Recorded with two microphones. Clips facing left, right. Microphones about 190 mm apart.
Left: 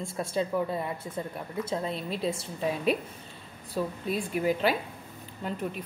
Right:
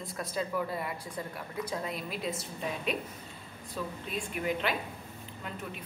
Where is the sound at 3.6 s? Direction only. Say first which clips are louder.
Left 7 dB; 35° left (ahead or behind).